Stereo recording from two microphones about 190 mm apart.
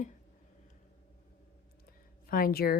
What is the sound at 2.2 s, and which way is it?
Speech, 50° left (ahead or behind).